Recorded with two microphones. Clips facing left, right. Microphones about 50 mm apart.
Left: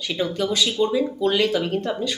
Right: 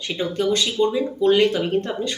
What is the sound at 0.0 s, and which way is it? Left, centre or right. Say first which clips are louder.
Speech: left 1 dB; centre.